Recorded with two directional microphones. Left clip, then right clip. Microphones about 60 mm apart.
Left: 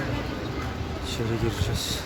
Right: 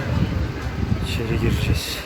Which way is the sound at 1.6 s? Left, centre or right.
Centre.